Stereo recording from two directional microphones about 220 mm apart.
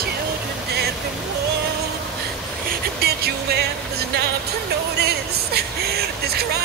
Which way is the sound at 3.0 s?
45° right (ahead or behind).